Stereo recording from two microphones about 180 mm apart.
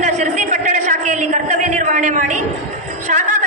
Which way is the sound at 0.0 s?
40° right (ahead or behind).